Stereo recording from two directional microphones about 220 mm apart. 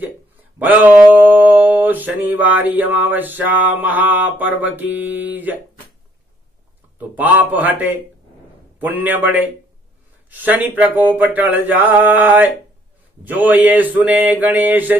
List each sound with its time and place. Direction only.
0.7 s mantra: 10° right (ahead or behind)
7.2 s mantra: 5° right (ahead or behind)
9.0 s mantra: 10° right (ahead or behind)
10.3 s mantra: 10° right (ahead or behind)